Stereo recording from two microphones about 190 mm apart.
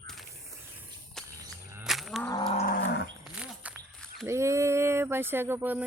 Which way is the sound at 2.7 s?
60° left (ahead or behind).